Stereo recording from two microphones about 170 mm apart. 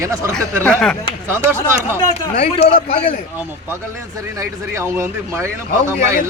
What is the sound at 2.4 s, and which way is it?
Speech, 35° left (ahead or behind).